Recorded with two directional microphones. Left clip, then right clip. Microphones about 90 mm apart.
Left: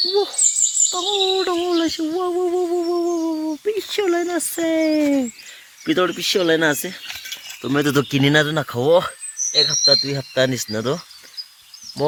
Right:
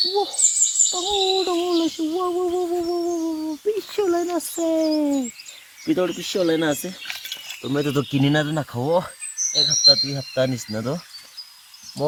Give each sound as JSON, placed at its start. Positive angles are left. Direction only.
{"t": 0.1, "sound": "speech", "side_deg": 25}
{"t": 2.3, "sound": "humming", "side_deg": 20}
{"t": 3.7, "sound": "a sound", "side_deg": 5}
{"t": 4.5, "sound": "speech", "side_deg": 15}
{"t": 9.6, "sound": "speech", "side_deg": 50}
{"t": 10.3, "sound": "speech", "side_deg": 15}